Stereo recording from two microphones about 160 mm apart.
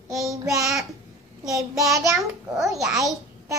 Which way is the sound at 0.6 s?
Centre (ahead or behind).